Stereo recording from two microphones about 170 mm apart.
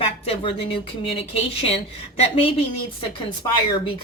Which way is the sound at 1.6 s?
35° left (ahead or behind).